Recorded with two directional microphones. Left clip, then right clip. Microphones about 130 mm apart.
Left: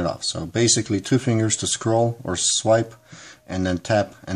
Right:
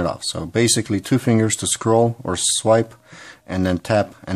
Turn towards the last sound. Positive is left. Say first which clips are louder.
# right 2 dB
turn(degrees=-30)  # may be behind; listen again after turning